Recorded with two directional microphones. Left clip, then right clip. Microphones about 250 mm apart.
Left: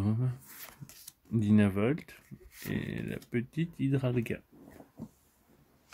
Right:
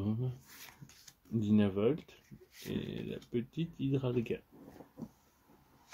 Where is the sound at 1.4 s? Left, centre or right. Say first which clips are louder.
Left 2 dB; left.